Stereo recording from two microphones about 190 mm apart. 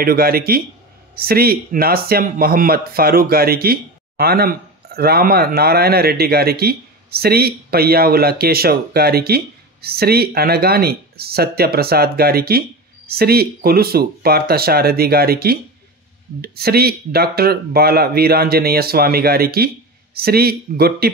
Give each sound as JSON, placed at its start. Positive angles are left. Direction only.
{"t": 0.0, "sound": "speech", "side_deg": -50}